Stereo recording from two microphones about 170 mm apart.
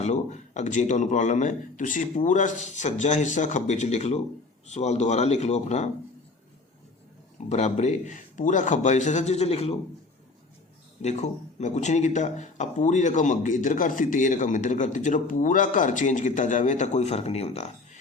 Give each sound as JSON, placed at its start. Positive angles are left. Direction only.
{"t": 0.0, "sound": "speech", "side_deg": 40}
{"t": 7.5, "sound": "speech", "side_deg": 40}
{"t": 11.0, "sound": "speech", "side_deg": 40}